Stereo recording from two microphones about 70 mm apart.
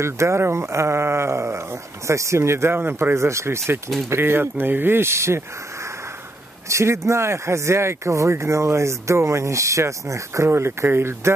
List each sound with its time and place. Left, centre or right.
0.0 s speech: right
6.7 s speech: right